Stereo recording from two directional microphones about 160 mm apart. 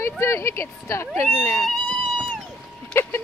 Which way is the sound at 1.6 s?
Centre (ahead or behind).